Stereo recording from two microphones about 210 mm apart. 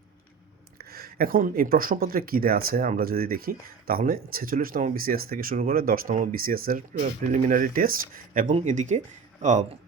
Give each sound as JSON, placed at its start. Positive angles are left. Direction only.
{"t": 0.8, "sound": "speech", "side_deg": -45}